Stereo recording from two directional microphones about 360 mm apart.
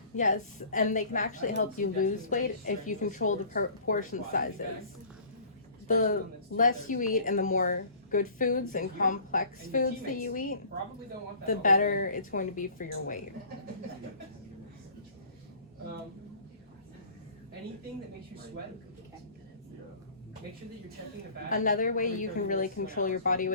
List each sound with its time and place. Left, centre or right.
0.2 s a woman's voice: left
6.6 s a woman's voice: left
21.5 s a woman's voice: left